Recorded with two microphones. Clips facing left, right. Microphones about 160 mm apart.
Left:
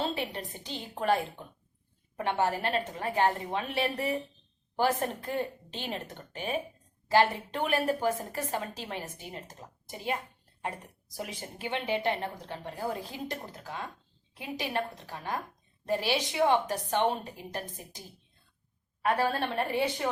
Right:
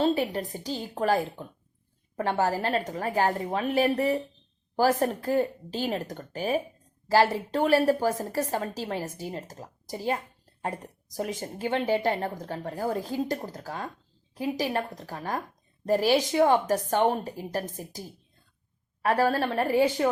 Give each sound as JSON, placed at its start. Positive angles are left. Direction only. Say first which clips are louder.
{"t": 0.2, "sound": "a woman's voice", "louder": "right 7 dB", "side_deg": -40}
{"t": 19.0, "sound": "a woman's voice", "louder": "right 4 dB", "side_deg": -40}